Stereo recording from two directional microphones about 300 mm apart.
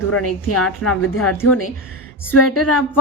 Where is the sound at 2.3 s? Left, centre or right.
Left.